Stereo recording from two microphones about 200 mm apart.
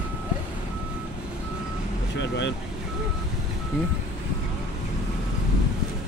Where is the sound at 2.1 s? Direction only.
60° left (ahead or behind).